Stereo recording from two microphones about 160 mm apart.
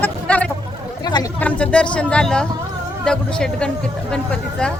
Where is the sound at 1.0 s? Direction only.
25° left (ahead or behind).